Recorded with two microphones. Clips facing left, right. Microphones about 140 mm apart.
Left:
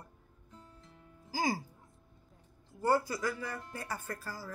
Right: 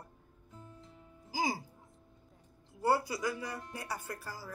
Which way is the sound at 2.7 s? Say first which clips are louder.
Left 1 dB; 15° right (ahead or behind).